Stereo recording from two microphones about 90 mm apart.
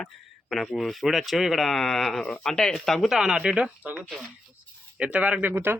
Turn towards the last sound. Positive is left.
turn(degrees=-20)  # may be behind; listen again after turning